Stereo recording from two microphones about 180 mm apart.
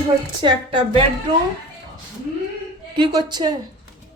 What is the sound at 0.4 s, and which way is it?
Speech, 30° right (ahead or behind).